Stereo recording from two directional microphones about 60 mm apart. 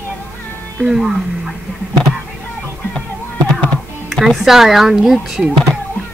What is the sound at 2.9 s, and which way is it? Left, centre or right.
Music, centre.